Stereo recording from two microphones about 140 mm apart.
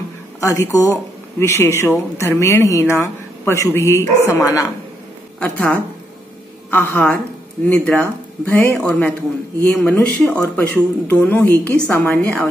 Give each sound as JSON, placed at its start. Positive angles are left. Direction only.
{"t": 0.4, "sound": "speech", "side_deg": 20}
{"t": 5.4, "sound": "speech", "side_deg": 10}
{"t": 9.6, "sound": "speech", "side_deg": 15}